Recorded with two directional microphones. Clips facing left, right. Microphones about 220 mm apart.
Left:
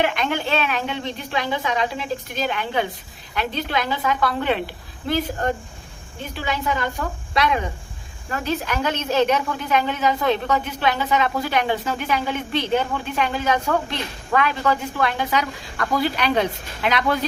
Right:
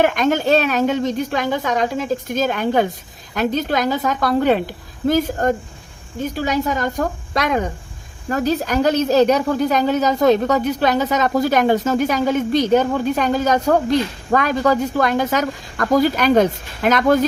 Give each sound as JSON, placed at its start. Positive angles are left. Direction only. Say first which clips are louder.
{"t": 0.0, "sound": "a woman's voice", "louder": "right 6 dB", "side_deg": -45}